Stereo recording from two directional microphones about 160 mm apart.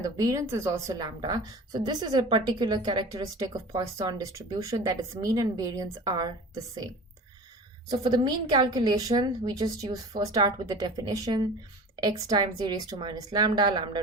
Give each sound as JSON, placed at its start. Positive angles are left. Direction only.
{"t": 0.0, "sound": "a woman's voice", "side_deg": -20}
{"t": 7.9, "sound": "a woman's voice", "side_deg": -25}